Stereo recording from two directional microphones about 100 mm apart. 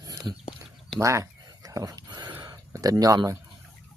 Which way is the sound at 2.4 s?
40° right (ahead or behind).